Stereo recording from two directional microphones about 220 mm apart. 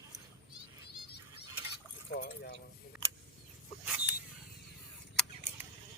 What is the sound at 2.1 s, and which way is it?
Speech, 45° left (ahead or behind).